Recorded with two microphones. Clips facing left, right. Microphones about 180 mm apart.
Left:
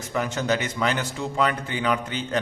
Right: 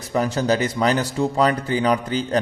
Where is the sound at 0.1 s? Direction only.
35° right (ahead or behind).